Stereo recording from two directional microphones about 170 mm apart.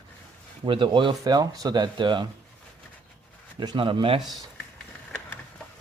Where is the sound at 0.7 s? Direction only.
30° right (ahead or behind).